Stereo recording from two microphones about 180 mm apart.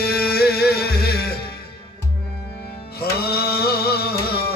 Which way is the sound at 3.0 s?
60° left (ahead or behind).